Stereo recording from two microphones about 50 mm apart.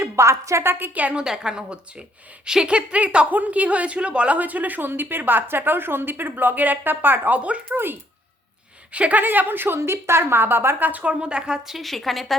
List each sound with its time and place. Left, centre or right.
0.0 s a woman's voice: right
0.6 s a woman's voice: right
1.1 s a woman's voice: centre
4.4 s a woman's voice: right
7.7 s a woman's voice: right
8.9 s a woman's voice: right
10.8 s speech: right
11.1 s a woman's voice: centre